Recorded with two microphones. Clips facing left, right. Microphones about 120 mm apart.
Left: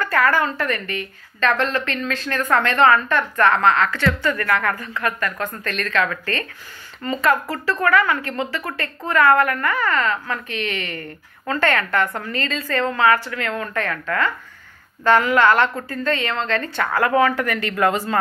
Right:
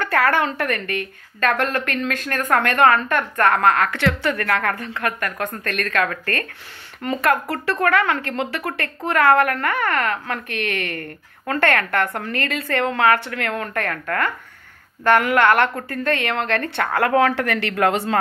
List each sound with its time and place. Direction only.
0.0 s speech: 70° right (ahead or behind)
1.4 s a woman's voice: 55° right (ahead or behind)
7.0 s a woman's voice: 65° right (ahead or behind); by 18.1 s 80° right